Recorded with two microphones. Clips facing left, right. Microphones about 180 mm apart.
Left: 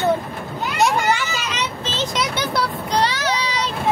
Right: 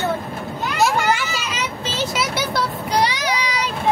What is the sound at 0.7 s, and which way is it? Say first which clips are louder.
Vehicle: even; 5° right (ahead or behind).